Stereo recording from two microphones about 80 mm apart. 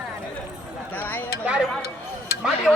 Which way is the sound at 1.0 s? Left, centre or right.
Left.